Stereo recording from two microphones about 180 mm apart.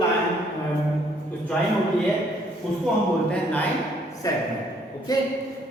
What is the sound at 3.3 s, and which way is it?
Speech, 5° left (ahead or behind).